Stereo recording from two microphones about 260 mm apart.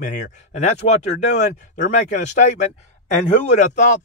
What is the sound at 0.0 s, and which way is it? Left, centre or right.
Speech, left.